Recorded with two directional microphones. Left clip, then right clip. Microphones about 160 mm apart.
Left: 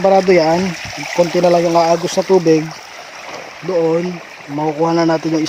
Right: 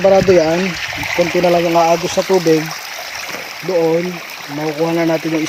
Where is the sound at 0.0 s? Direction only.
30° left (ahead or behind).